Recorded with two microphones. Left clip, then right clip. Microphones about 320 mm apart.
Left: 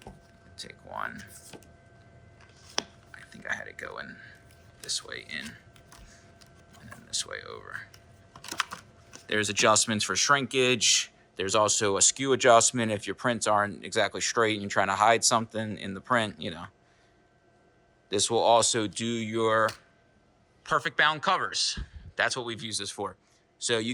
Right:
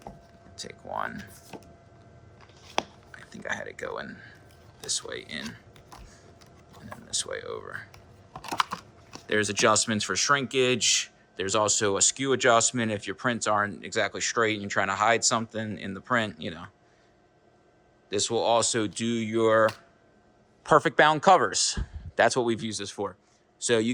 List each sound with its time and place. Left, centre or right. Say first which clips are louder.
0.6 s speech: right 3 dB; centre
3.1 s speech: right 1 dB; centre
7.1 s computer keyboard: right 3 dB; centre
9.2 s speech: right 1 dB; centre
18.1 s speech: left 2 dB; centre
21.0 s speech: right 4 dB; centre